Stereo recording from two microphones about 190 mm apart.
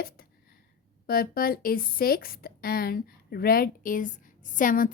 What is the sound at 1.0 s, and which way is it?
Speech, 50° left (ahead or behind).